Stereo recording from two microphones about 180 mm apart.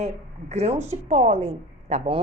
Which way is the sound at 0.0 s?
35° right (ahead or behind).